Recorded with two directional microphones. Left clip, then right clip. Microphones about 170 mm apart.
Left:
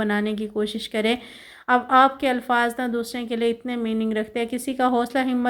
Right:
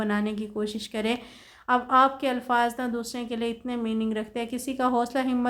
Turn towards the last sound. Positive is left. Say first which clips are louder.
# left 3 dB
turn(degrees=15)  # may be behind; listen again after turning